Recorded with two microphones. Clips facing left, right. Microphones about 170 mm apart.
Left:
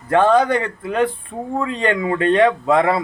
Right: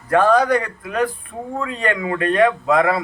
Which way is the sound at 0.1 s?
25° left (ahead or behind).